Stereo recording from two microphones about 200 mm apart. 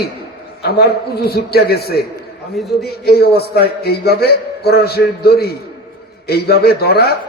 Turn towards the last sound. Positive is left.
turn(degrees=50)  # may be behind; listen again after turning